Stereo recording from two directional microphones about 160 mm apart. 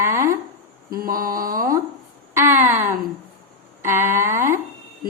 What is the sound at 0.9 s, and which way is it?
Speech, 65° right (ahead or behind).